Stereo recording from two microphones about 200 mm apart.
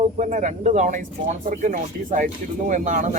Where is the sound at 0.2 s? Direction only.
40° right (ahead or behind).